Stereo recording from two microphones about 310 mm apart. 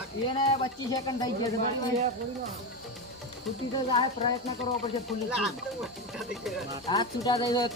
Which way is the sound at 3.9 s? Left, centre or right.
Centre.